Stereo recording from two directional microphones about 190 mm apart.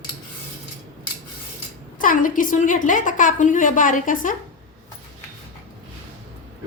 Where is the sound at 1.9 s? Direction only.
45° left (ahead or behind).